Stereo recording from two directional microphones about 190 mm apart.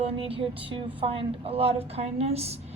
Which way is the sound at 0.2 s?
30° right (ahead or behind).